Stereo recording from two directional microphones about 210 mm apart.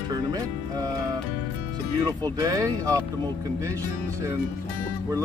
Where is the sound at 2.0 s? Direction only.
20° right (ahead or behind).